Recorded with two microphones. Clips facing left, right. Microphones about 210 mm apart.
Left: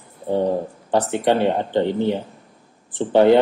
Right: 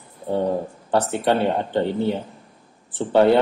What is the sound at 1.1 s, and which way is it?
Speech, 15° left (ahead or behind).